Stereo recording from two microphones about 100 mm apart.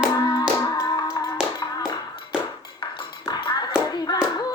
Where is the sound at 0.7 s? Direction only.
35° left (ahead or behind).